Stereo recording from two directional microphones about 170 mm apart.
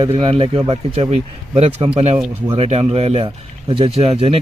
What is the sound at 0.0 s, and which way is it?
Speech, 30° right (ahead or behind).